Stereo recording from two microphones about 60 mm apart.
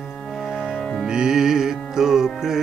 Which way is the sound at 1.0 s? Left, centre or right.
Centre.